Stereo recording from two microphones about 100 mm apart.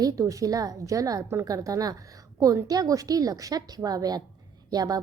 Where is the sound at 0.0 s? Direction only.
35° right (ahead or behind).